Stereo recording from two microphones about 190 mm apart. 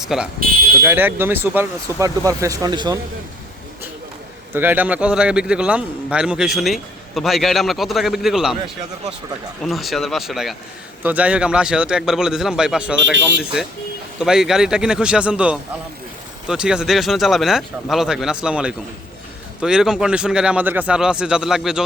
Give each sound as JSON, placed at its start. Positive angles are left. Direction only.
{"t": 0.0, "sound": "speech", "side_deg": 0}
{"t": 4.5, "sound": "a man's voice", "side_deg": -10}
{"t": 9.6, "sound": "a man's voice", "side_deg": 0}